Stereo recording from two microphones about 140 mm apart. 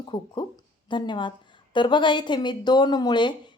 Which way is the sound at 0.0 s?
30° left (ahead or behind).